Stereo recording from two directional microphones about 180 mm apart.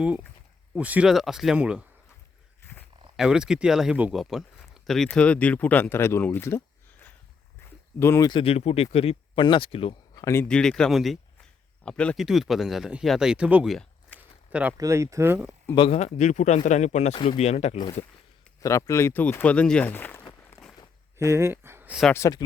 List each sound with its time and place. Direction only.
0.0 s speech: 5° right (ahead or behind)
3.2 s speech: 5° right (ahead or behind); by 6.6 s 15° left (ahead or behind)
7.9 s speech: 15° left (ahead or behind); by 10.2 s 30° left (ahead or behind)
10.5 s speech: 5° left (ahead or behind)
14.2 s a sound: 5° right (ahead or behind)
14.8 s speech: 15° right (ahead or behind)
15.7 s speech: 30° left (ahead or behind)
18.6 s speech: 20° left (ahead or behind)
21.2 s speech: 15° right (ahead or behind)
22.1 s speech: 20° left (ahead or behind)